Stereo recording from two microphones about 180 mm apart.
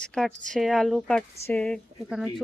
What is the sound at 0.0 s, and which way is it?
Speech, 5° left (ahead or behind).